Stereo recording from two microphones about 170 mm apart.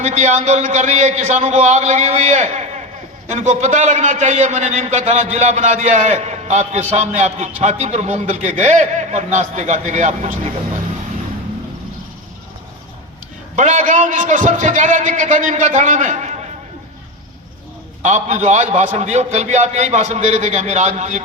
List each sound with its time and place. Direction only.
0.0 s a man's voice: 45° right (ahead or behind)
13.6 s a man's voice: 45° right (ahead or behind)
18.0 s a man's voice: 45° right (ahead or behind)